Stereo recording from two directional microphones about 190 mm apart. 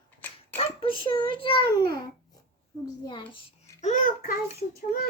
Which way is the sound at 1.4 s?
25° left (ahead or behind).